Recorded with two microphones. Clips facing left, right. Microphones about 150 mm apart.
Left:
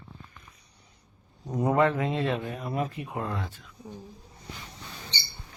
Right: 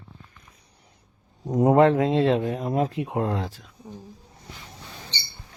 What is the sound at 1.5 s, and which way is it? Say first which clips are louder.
Speech: right 7 dB; 25° right (ahead or behind).